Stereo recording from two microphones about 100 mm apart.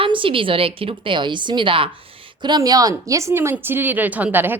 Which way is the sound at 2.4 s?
45° right (ahead or behind).